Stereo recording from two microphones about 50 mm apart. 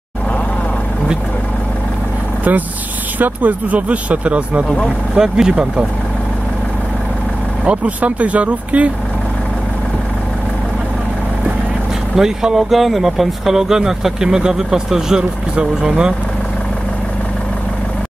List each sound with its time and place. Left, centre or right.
3.2 s speech: right
5.1 s speech: centre
7.6 s speech: right
12.2 s speech: centre